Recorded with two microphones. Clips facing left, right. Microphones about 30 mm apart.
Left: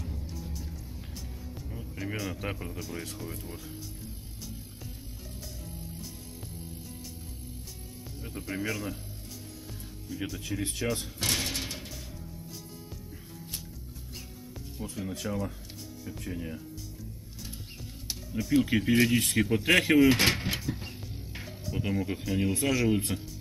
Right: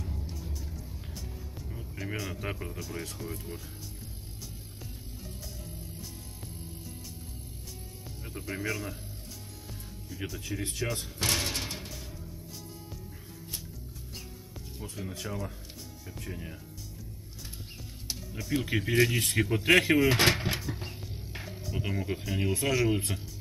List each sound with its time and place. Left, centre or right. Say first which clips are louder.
1.7 s music: left 1 dB; centre
2.4 s speech: left 1 dB; centre
8.2 s speech: left 1 dB; centre
10.0 s speech: left 2 dB; centre
11.1 s a sound: right 5 dB; right
11.5 s music: even; right
14.8 s speech: left 3 dB; centre
18.0 s music: left 4 dB; centre
18.8 s speech: left 2 dB; centre
20.2 s a sound: right 1 dB; right
20.6 s music: left 2 dB; centre
21.5 s speech: left 3 dB; centre